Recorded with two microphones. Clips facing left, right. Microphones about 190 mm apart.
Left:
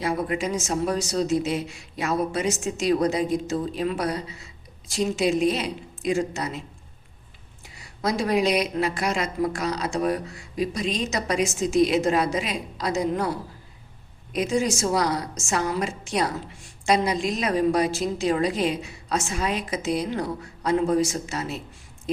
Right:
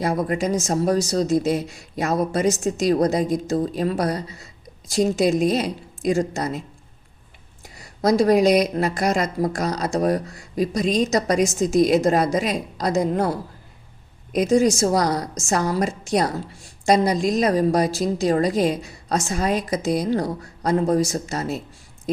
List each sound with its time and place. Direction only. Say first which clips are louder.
0.0 s a woman's voice: right 3 dB; 40° right (ahead or behind)
7.6 s a woman's voice: right 6 dB; 40° right (ahead or behind)
14.3 s a woman's voice: right 6 dB; 40° right (ahead or behind)